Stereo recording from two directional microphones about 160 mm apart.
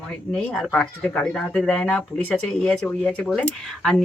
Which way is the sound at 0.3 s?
5° left (ahead or behind).